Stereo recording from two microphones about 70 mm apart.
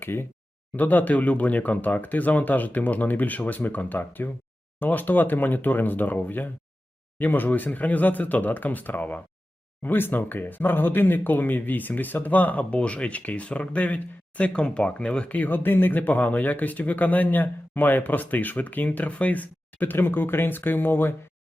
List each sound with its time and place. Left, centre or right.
0.0 s speech: left